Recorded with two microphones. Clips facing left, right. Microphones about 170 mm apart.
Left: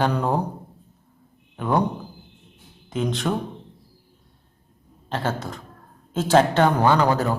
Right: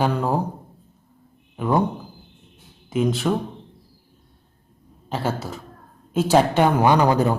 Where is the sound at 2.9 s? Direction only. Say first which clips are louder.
Right 3 dB; 5° right (ahead or behind).